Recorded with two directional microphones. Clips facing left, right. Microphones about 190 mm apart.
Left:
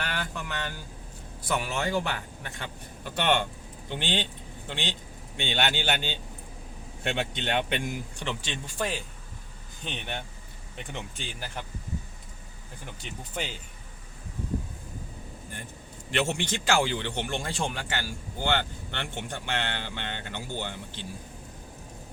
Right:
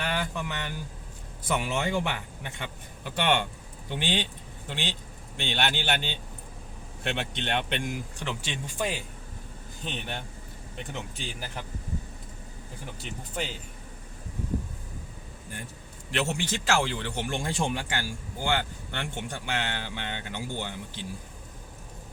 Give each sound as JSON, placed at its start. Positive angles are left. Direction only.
{"t": 0.0, "sound": "a man's voice", "side_deg": -20}
{"t": 7.0, "sound": "a man's voice", "side_deg": 0}
{"t": 13.0, "sound": "a man's voice", "side_deg": 0}
{"t": 16.1, "sound": "a man's voice", "side_deg": 0}